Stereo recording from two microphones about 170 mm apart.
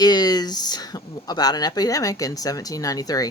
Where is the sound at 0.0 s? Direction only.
25° left (ahead or behind).